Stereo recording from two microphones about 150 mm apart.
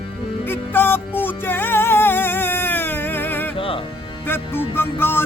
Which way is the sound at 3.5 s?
35° left (ahead or behind).